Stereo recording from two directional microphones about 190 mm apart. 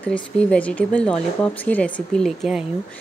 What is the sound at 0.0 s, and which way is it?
Speech, 5° left (ahead or behind).